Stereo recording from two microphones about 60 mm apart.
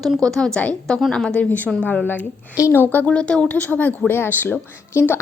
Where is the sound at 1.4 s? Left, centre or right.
Left.